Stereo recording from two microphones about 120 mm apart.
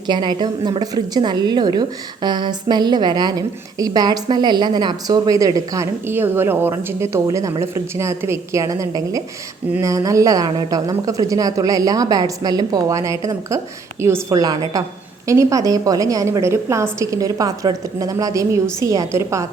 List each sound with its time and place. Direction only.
0.1 s a woman's voice: 40° right (ahead or behind)